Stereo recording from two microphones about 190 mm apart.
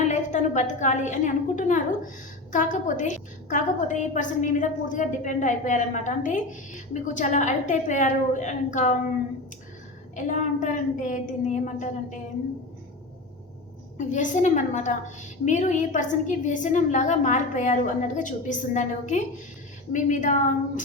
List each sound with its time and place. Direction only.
0.1 s a woman's voice: 40° left (ahead or behind)
10.2 s a woman's voice: 40° left (ahead or behind)
14.1 s a woman's voice: 40° left (ahead or behind)